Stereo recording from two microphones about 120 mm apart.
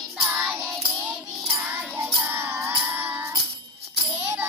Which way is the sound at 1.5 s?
20° right (ahead or behind).